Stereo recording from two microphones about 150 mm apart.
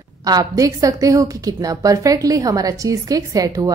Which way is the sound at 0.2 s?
25° right (ahead or behind).